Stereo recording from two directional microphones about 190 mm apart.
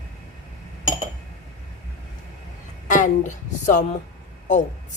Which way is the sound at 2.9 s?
40° left (ahead or behind).